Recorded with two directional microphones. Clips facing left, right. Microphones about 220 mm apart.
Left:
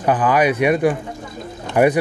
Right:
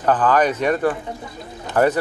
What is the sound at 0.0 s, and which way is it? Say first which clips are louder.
Speech: left 1 dB; 10° left (ahead or behind).